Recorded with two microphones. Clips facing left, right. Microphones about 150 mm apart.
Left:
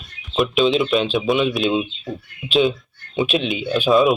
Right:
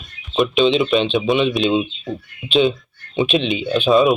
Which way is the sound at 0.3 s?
Centre (ahead or behind).